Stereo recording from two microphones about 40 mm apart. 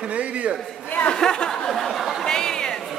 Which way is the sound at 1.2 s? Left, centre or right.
Centre.